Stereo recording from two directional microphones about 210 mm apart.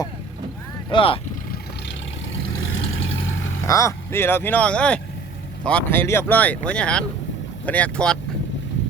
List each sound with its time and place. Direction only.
0.9 s speech: 25° left (ahead or behind)
2.3 s vehicle: 65° left (ahead or behind)
3.7 s speech: 15° left (ahead or behind)